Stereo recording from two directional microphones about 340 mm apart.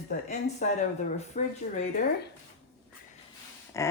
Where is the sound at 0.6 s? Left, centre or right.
Left.